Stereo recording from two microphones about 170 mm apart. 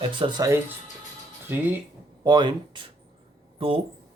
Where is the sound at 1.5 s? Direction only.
10° right (ahead or behind).